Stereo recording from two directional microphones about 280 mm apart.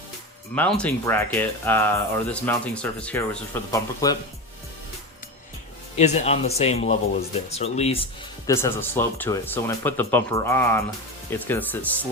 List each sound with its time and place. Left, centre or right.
0.5 s speech: centre
6.0 s speech: left
8.4 s speech: centre